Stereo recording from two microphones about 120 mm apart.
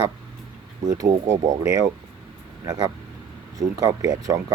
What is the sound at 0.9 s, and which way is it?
Speech, 30° right (ahead or behind).